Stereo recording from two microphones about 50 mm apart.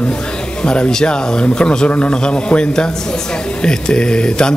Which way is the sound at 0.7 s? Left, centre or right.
Centre.